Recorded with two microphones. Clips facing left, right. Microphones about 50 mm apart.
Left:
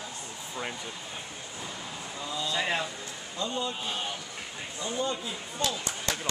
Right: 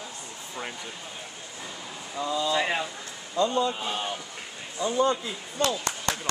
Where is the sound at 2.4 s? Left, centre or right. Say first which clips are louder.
Right 1 dB; centre.